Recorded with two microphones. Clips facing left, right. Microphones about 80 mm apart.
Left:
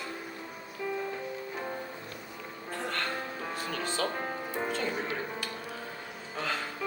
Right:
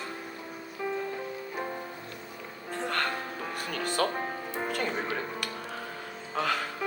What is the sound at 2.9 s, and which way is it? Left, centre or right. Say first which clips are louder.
Music: right 5 dB; right.